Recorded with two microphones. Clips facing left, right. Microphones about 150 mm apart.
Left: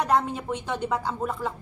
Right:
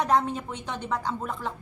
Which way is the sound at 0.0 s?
5° left (ahead or behind).